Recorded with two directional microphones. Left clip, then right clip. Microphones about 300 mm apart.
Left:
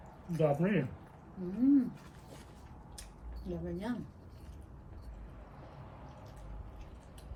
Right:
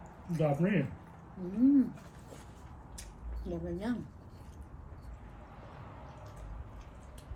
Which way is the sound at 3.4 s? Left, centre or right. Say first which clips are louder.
Right 2 dB; centre.